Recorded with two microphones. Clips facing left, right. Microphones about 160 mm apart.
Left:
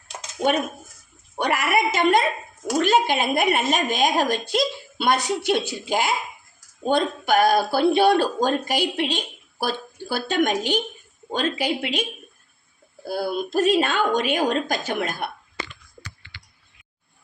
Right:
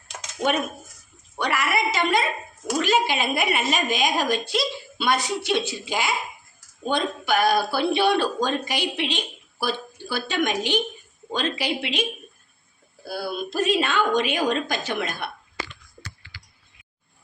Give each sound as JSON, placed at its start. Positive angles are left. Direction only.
{"t": 1.4, "sound": "a woman's voice", "side_deg": 50}
{"t": 13.1, "sound": "a woman's voice", "side_deg": 45}